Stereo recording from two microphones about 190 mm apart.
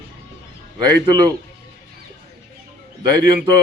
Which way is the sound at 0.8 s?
20° right (ahead or behind).